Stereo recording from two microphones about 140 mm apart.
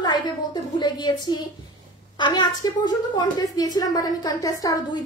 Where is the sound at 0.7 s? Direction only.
30° left (ahead or behind).